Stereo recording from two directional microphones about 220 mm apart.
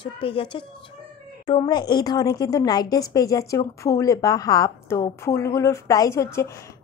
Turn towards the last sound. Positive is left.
turn(degrees=15)  # may be behind; listen again after turning